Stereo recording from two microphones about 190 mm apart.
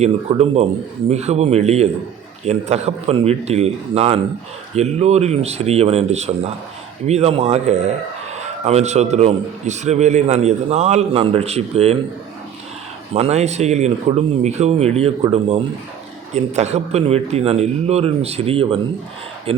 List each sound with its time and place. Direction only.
0.0 s a man's voice: 35° right (ahead or behind)
13.1 s a man's voice: 35° right (ahead or behind)